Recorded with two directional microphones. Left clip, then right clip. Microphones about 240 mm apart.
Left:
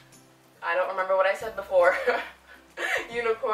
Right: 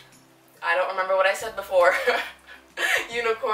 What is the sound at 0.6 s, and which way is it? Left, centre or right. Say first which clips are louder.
Speech: right 3 dB; centre.